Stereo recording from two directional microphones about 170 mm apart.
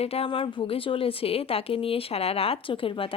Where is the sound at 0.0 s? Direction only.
35° left (ahead or behind).